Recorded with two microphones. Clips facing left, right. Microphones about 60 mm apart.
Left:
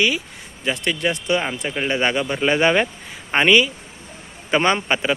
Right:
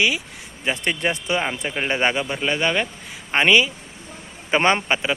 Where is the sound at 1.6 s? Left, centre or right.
Centre.